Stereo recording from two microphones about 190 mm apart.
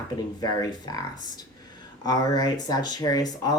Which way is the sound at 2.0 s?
20° left (ahead or behind).